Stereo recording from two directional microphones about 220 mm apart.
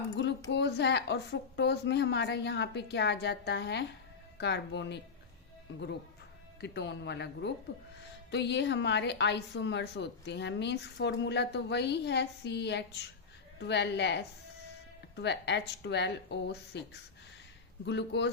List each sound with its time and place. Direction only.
0.2 s a sound: 55° left (ahead or behind)
0.5 s a woman's voice: 50° left (ahead or behind)
6.6 s a woman's voice: 50° left (ahead or behind)